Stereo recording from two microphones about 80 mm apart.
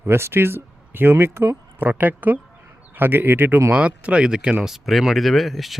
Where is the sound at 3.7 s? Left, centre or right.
Centre.